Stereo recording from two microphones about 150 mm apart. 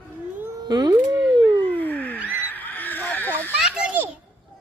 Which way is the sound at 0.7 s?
30° right (ahead or behind).